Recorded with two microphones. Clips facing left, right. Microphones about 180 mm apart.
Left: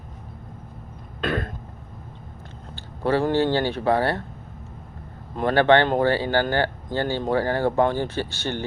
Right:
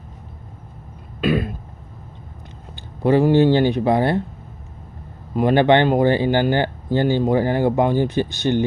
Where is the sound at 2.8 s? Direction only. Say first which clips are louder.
Right 6 dB; 15° right (ahead or behind).